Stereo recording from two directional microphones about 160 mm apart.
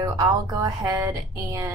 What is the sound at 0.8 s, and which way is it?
Speech, 20° right (ahead or behind).